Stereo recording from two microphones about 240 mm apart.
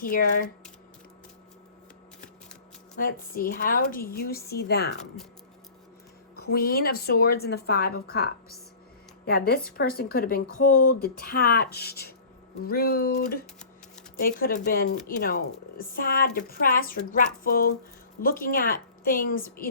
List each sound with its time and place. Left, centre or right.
0.0 s a woman's voice: left
3.0 s a woman's voice: left
6.4 s a woman's voice: left